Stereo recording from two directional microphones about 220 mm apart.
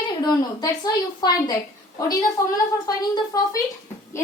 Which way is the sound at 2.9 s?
15° left (ahead or behind).